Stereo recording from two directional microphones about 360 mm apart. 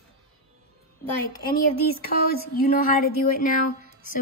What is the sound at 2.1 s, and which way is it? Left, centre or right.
Speech, left.